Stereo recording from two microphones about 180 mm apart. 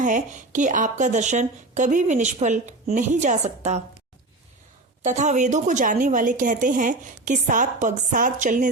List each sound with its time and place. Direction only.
0.0 s speech: 45° right (ahead or behind)
5.0 s speech: 40° right (ahead or behind)